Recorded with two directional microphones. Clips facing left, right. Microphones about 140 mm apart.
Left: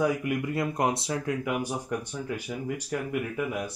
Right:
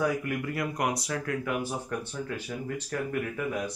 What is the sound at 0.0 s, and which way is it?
Speech, 20° left (ahead or behind).